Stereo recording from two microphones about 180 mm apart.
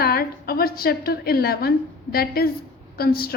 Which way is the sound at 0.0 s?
60° left (ahead or behind).